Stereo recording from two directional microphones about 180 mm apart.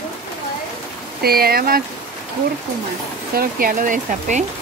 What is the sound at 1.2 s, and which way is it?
Speech, 60° right (ahead or behind).